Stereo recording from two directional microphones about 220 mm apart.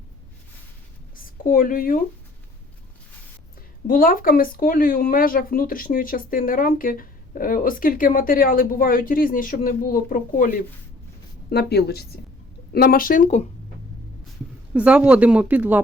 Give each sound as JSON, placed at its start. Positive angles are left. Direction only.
{"t": 1.1, "sound": "speech", "side_deg": 40}
{"t": 3.8, "sound": "a woman's voice", "side_deg": 40}
{"t": 14.7, "sound": "speech", "side_deg": -5}